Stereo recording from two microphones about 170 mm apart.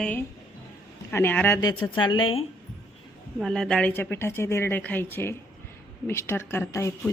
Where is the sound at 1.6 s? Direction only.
25° left (ahead or behind).